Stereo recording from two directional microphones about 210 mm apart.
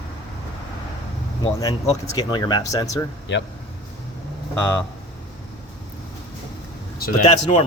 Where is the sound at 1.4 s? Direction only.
20° left (ahead or behind).